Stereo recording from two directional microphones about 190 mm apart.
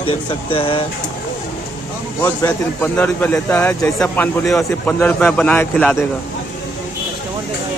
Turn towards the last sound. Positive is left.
turn(degrees=10)  # may be behind; listen again after turning